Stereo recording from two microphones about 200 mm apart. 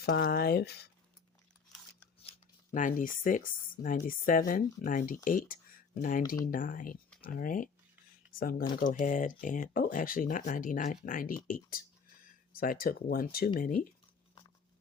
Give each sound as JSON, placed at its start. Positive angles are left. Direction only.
{"t": 0.0, "sound": "speech", "side_deg": 50}
{"t": 2.7, "sound": "speech", "side_deg": 40}